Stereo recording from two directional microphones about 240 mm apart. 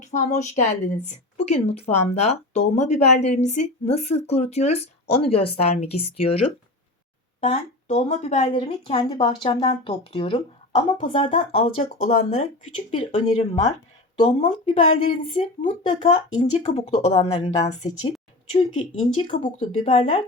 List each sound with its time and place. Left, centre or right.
0.0 s speech: left
7.4 s speech: left